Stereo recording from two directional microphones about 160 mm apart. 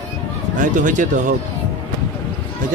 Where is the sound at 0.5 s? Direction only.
55° right (ahead or behind).